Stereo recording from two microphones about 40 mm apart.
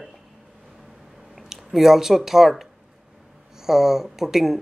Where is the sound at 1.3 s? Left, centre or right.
Centre.